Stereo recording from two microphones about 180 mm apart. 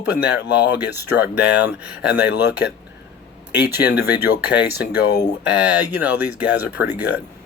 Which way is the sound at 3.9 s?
65° left (ahead or behind).